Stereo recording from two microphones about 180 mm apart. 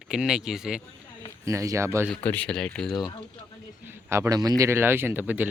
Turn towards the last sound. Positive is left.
turn(degrees=-10)  # may be behind; listen again after turning